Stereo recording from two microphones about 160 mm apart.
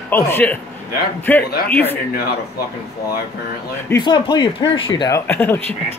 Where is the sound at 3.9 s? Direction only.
30° left (ahead or behind).